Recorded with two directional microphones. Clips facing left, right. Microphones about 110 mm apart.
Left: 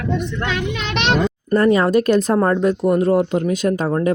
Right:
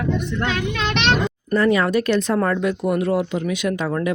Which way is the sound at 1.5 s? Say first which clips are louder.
Left 3 dB; 40° left (ahead or behind).